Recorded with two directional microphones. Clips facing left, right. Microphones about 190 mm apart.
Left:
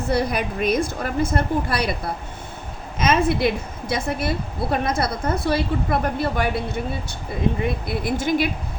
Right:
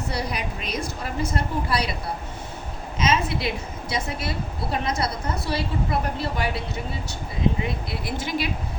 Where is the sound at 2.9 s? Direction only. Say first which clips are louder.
Left 4 dB; 55° left (ahead or behind).